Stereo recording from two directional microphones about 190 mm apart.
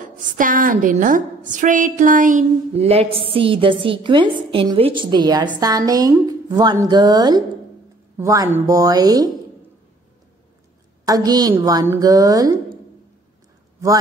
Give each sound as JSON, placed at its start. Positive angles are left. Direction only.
{"t": 0.0, "sound": "a woman's voice", "side_deg": -45}
{"t": 2.7, "sound": "a woman's voice", "side_deg": -30}
{"t": 11.1, "sound": "a woman's voice", "side_deg": -20}